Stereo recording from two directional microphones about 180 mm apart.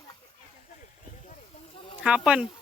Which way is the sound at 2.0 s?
5° right (ahead or behind).